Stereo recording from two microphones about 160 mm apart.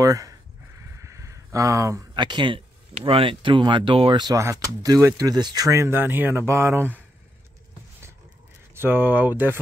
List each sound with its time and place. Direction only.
0.0 s speech: 20° right (ahead or behind)
8.7 s speech: 15° right (ahead or behind)